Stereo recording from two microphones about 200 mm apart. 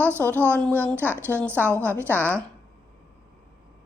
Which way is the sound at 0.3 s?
10° right (ahead or behind).